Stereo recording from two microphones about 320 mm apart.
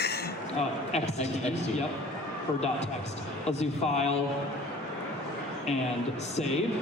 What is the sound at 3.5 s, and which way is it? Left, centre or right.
Speech, centre.